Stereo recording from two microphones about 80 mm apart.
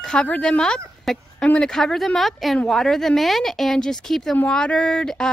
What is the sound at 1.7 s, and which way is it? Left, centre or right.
A woman's voice, centre.